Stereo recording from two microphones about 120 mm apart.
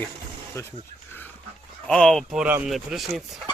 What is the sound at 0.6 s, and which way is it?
Speech, 25° left (ahead or behind).